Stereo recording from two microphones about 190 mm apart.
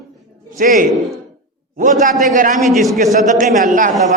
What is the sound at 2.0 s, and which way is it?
Speech, 45° right (ahead or behind).